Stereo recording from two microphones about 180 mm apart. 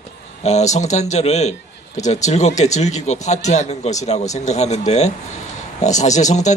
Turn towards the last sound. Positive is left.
turn(degrees=40)  # may be behind; listen again after turning